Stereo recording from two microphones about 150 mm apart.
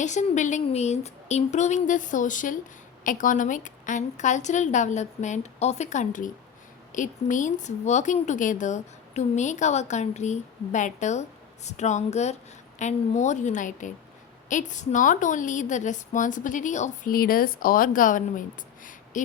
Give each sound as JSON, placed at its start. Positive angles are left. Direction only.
{"t": 0.0, "sound": "a woman's voice", "side_deg": 55}